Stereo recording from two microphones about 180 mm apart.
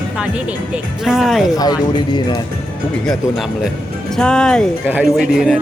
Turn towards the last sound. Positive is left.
turn(degrees=-5)  # may be behind; listen again after turning